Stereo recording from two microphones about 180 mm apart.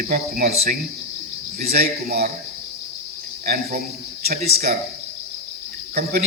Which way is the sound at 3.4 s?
55° right (ahead or behind).